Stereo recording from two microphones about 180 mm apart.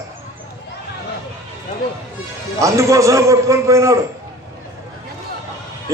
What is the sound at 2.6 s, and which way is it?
A man's voice, 15° right (ahead or behind).